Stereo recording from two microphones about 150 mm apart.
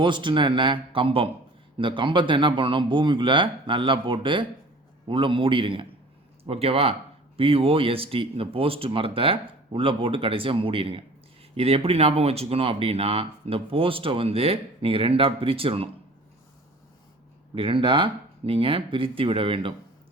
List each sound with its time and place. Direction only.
0.0 s speech: 30° right (ahead or behind)
17.5 s speech: 35° right (ahead or behind)